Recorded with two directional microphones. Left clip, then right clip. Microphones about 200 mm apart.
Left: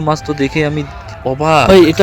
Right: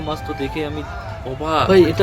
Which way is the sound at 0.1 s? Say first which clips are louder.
Left 10 dB; 40° left (ahead or behind).